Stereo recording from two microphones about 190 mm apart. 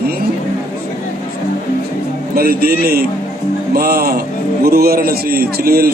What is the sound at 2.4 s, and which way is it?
A man's voice, 50° right (ahead or behind).